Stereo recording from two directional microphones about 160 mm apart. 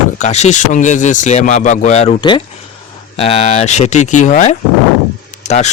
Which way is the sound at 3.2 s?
40° left (ahead or behind).